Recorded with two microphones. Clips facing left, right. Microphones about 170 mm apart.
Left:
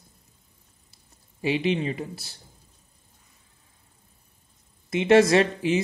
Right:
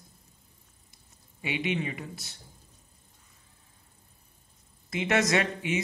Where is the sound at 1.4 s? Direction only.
35° left (ahead or behind).